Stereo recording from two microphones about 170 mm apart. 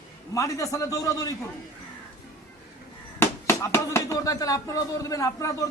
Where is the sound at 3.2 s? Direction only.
15° left (ahead or behind).